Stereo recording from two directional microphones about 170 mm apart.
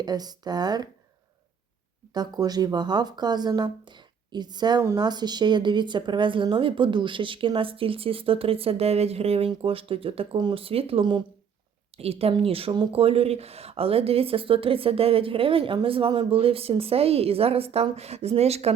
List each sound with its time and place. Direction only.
0.0 s speech: 25° right (ahead or behind)
2.1 s speech: 25° right (ahead or behind)